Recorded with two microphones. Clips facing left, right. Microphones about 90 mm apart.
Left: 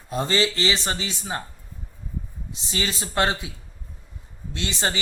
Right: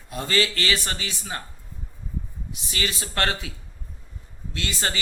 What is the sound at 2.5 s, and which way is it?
Speech, 30° left (ahead or behind).